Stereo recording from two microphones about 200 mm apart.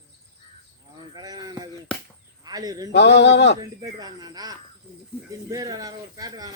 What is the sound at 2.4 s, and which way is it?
Speech, 20° right (ahead or behind).